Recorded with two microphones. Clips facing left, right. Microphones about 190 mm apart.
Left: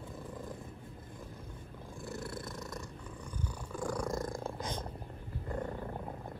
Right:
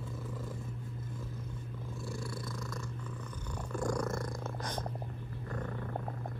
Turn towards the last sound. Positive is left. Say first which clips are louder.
# left 2 dB
turn(degrees=30)  # may be behind; listen again after turning